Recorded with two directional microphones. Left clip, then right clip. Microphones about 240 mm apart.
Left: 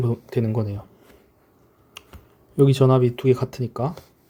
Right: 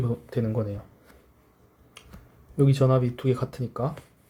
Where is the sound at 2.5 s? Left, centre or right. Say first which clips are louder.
Left 5 dB; left.